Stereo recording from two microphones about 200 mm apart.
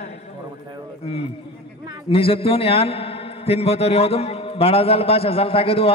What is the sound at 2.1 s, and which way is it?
A man's voice, 30° left (ahead or behind).